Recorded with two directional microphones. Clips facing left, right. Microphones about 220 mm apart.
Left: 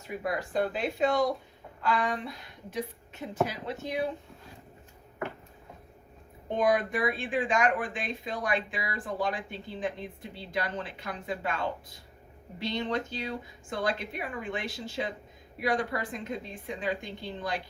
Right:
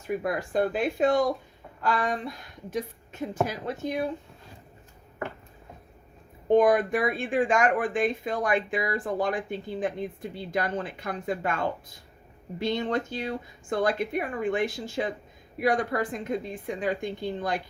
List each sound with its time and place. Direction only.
0.2 s a woman's voice: 50° right (ahead or behind)
6.5 s speech: 50° right (ahead or behind)